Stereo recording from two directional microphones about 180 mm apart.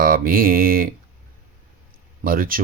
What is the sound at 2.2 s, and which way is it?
Speech, 50° right (ahead or behind).